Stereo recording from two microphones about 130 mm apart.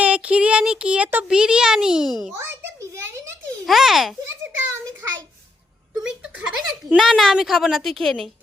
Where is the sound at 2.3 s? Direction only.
20° right (ahead or behind).